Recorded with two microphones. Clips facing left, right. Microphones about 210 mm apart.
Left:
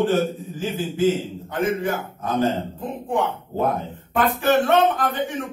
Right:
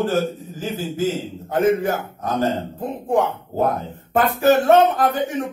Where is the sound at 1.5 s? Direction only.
45° right (ahead or behind).